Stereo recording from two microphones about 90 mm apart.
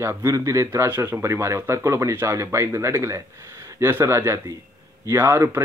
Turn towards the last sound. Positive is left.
turn(degrees=-30)  # may be behind; listen again after turning